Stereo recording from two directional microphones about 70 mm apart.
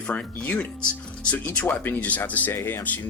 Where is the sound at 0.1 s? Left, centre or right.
Centre.